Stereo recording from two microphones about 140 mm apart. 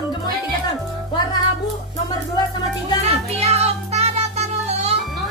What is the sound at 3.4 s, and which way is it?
Child singing, 50° right (ahead or behind).